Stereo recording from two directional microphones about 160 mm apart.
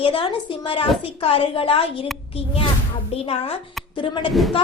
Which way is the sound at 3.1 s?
40° left (ahead or behind).